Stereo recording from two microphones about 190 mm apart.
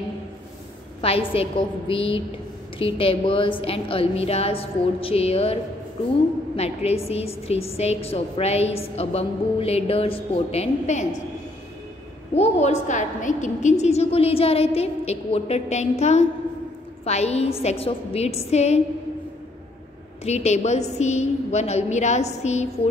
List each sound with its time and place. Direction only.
1.0 s a woman's voice: 30° left (ahead or behind)
12.4 s a woman's voice: 35° left (ahead or behind)
20.2 s a woman's voice: 35° left (ahead or behind)